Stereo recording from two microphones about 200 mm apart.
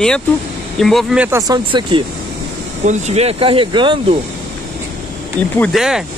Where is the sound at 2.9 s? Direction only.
35° right (ahead or behind).